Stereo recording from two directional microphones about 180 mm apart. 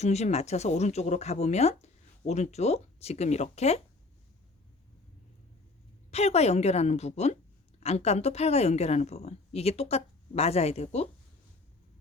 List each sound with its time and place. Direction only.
0.0 s speech: 35° left (ahead or behind)
6.1 s speech: 35° left (ahead or behind)